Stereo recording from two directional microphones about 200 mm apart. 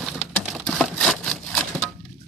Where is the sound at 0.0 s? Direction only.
Centre (ahead or behind).